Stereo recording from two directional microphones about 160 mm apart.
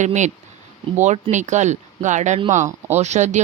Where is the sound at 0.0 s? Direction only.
50° right (ahead or behind).